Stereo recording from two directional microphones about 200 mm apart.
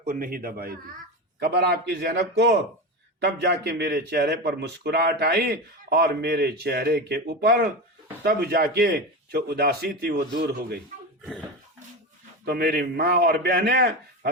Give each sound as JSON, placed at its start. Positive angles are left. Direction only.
{"t": 0.0, "sound": "a man's voice", "side_deg": -45}
{"t": 12.5, "sound": "a man's voice", "side_deg": -50}